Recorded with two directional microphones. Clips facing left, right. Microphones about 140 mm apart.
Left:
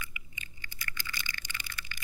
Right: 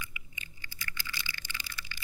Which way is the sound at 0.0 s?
50° left (ahead or behind).